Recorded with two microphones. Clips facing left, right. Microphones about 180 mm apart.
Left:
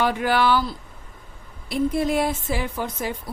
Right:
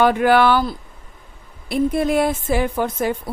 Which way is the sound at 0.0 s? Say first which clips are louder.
Right 6 dB; 55° right (ahead or behind).